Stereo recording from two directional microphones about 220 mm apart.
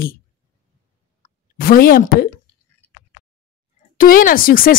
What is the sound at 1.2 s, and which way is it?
Speech, 40° left (ahead or behind).